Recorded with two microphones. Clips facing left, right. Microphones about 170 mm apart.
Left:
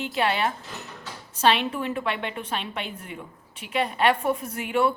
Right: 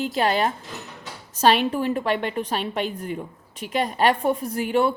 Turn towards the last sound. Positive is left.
turn(degrees=-35)  # may be behind; listen again after turning